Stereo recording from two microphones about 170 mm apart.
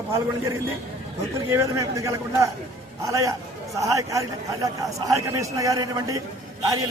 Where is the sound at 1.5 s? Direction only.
20° right (ahead or behind).